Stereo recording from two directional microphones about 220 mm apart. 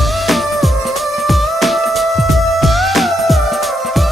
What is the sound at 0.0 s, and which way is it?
Music, centre (ahead or behind).